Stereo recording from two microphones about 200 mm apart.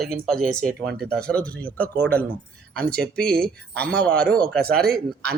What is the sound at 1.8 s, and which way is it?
Speech, 55° right (ahead or behind).